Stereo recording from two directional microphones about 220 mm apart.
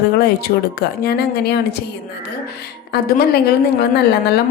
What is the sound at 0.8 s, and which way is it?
Speech, 45° left (ahead or behind).